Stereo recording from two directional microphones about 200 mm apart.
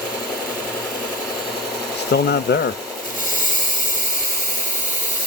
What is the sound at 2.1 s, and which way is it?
Speech, 55° left (ahead or behind).